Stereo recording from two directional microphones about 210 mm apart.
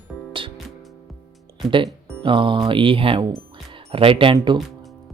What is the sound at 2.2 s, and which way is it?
Speech, 25° right (ahead or behind).